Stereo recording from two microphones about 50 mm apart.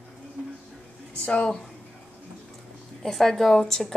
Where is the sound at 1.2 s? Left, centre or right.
Left.